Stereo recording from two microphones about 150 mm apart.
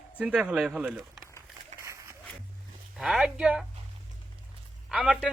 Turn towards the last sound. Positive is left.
turn(degrees=0)  # may be behind; listen again after turning